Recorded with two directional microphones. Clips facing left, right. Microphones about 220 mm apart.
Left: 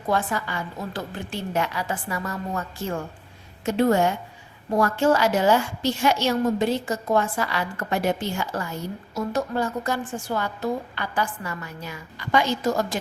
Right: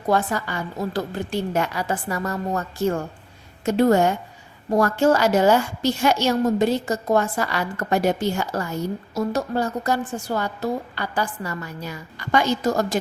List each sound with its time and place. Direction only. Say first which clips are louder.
0.1 s a woman's voice: right 3 dB; 40° right (ahead or behind)
3.7 s a woman's voice: right 3 dB; 40° right (ahead or behind)